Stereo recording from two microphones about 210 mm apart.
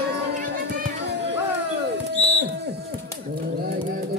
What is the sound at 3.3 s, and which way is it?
Bird, 45° right (ahead or behind).